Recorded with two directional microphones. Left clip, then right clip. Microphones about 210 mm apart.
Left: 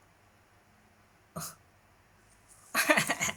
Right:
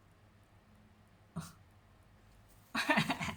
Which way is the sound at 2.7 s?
25° left (ahead or behind).